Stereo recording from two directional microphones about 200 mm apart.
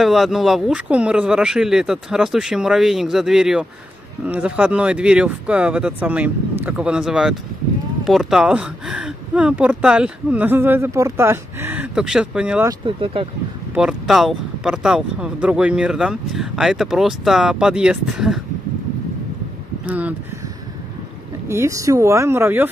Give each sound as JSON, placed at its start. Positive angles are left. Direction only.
{"t": 0.0, "sound": "speech", "side_deg": 0}
{"t": 12.6, "sound": "speech", "side_deg": -25}
{"t": 13.7, "sound": "speech", "side_deg": -5}
{"t": 19.9, "sound": "a sound", "side_deg": -5}
{"t": 21.5, "sound": "speech", "side_deg": -15}